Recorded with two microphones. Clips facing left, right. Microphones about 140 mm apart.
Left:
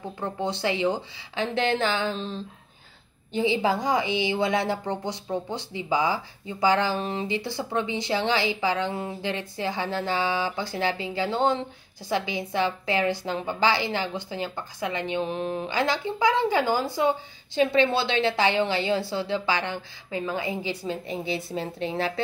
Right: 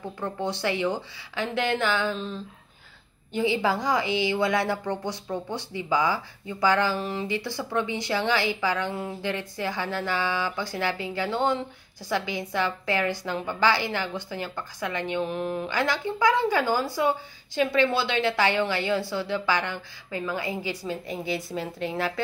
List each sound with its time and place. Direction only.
0.2 s a woman's voice: 20° left (ahead or behind)